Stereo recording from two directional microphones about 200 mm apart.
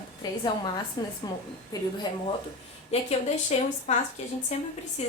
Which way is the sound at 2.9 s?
30° left (ahead or behind).